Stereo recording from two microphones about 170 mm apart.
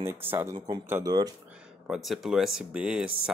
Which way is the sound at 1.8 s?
5° right (ahead or behind).